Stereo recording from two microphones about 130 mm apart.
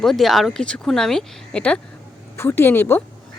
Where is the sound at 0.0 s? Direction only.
Centre (ahead or behind).